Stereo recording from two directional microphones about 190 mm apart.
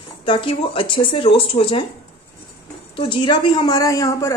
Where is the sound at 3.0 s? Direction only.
25° left (ahead or behind).